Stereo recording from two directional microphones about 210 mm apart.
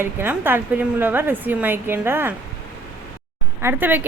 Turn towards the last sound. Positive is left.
turn(degrees=-10)  # may be behind; listen again after turning